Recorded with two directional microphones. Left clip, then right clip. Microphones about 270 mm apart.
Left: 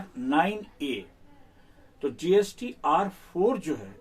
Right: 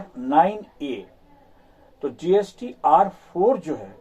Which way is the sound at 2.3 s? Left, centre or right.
Centre.